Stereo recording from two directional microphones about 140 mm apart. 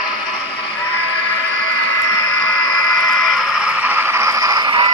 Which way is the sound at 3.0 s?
Centre (ahead or behind).